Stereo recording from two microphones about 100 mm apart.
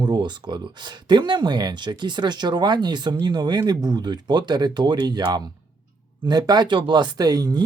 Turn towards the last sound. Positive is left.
turn(degrees=-45)  # may be behind; listen again after turning